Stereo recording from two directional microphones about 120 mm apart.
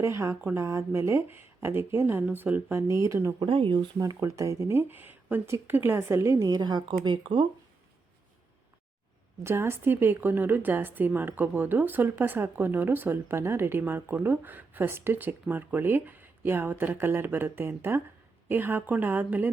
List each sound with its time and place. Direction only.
0.0 s a woman's voice: 25° right (ahead or behind)
3.4 s speech: 45° right (ahead or behind)
3.9 s speech: 25° right (ahead or behind)
9.4 s a woman's voice: 20° right (ahead or behind)